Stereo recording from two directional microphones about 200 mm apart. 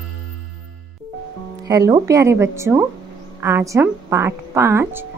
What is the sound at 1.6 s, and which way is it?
A woman's voice, 15° right (ahead or behind).